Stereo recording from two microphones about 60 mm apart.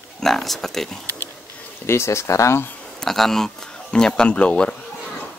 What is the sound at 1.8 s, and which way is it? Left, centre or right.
Speech, left.